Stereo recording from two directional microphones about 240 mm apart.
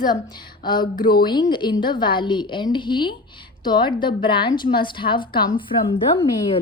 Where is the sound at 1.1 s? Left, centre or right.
Centre.